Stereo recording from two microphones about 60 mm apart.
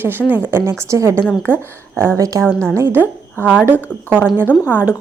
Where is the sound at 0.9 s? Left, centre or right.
Right.